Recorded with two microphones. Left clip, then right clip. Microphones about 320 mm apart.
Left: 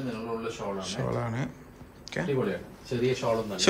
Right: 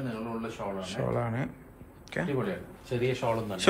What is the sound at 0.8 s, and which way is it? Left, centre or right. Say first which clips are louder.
A man's voice: right 4 dB; centre.